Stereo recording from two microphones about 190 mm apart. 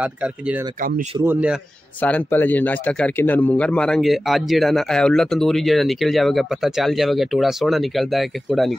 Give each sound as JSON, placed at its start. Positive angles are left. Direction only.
{"t": 0.0, "sound": "speech", "side_deg": -5}
{"t": 0.7, "sound": "speech", "side_deg": -45}
{"t": 1.2, "sound": "speech", "side_deg": -10}
{"t": 2.0, "sound": "a man's voice", "side_deg": 10}